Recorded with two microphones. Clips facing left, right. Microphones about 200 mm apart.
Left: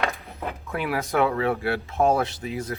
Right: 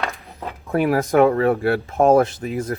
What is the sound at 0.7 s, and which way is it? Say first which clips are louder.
Speech: right 9 dB; 45° right (ahead or behind).